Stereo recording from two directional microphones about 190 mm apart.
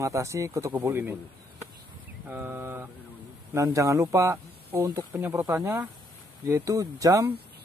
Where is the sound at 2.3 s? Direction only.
10° right (ahead or behind).